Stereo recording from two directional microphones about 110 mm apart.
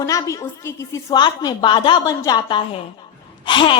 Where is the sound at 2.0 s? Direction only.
35° left (ahead or behind).